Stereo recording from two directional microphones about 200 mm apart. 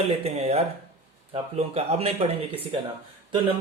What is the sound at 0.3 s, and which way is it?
Speech, 30° right (ahead or behind).